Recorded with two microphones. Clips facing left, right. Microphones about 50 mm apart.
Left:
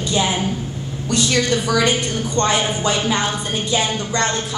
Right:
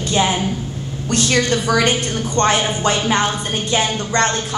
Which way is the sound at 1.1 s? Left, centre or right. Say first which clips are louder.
Right 1 dB; right.